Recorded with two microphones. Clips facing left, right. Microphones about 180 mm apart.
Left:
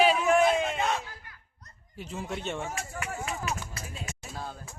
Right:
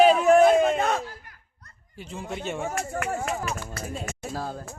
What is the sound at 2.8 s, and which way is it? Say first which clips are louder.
Speech: right 7 dB; 55° right (ahead or behind).